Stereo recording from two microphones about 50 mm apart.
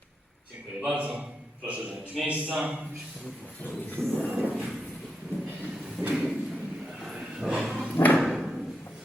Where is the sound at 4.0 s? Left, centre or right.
Right.